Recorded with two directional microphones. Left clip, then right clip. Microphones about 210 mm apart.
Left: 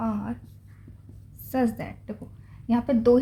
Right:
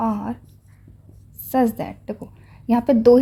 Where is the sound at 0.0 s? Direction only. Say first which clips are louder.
Right 7 dB; 35° right (ahead or behind).